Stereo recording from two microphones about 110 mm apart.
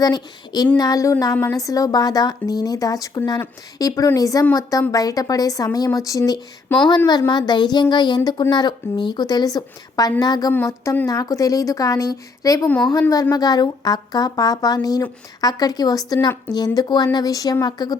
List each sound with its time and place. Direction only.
0.0 s a woman's voice: 35° left (ahead or behind)
10.5 s speech: 20° left (ahead or behind)
11.0 s a woman's voice: 30° left (ahead or behind)